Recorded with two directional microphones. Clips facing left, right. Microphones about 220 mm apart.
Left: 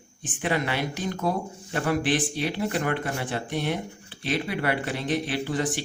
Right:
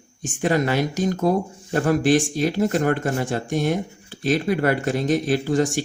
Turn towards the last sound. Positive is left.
turn(degrees=-45)  # may be behind; listen again after turning